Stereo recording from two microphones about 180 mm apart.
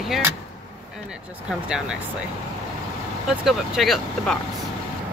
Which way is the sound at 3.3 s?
Centre (ahead or behind).